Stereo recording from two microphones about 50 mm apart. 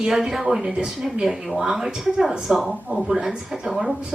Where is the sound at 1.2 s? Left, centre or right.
Centre.